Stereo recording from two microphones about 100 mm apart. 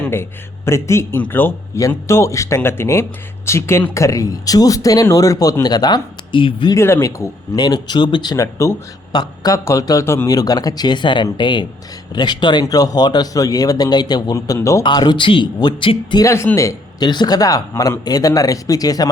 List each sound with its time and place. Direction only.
0.1 s speech: 25° left (ahead or behind); by 6.7 s 50° left (ahead or behind)
6.7 s speech: 25° left (ahead or behind)
7.5 s speech: 45° left (ahead or behind)
8.4 s speech: 30° left (ahead or behind)
9.1 s speech: 40° left (ahead or behind)
10.2 s speech: 40° left (ahead or behind)
14.8 s speech: 45° left (ahead or behind)
16.2 s speech: 30° left (ahead or behind)
17.0 s speech: 45° left (ahead or behind)